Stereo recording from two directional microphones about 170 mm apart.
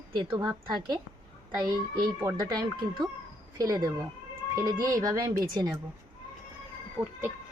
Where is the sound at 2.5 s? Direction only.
25° right (ahead or behind).